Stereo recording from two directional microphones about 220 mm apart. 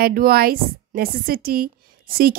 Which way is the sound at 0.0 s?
45° right (ahead or behind).